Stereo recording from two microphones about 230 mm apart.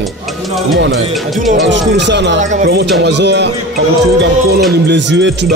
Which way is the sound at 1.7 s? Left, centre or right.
Right.